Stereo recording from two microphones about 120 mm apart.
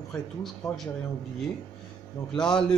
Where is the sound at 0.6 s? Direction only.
Centre (ahead or behind).